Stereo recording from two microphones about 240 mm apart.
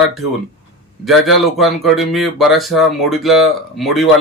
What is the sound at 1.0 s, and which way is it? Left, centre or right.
A man's voice, centre.